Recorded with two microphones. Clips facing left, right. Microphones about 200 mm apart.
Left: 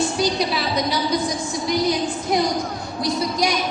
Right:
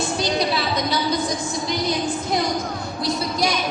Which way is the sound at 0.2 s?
10° left (ahead or behind).